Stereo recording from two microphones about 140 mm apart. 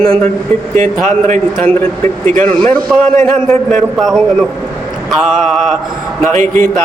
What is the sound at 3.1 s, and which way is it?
Speech, 15° left (ahead or behind).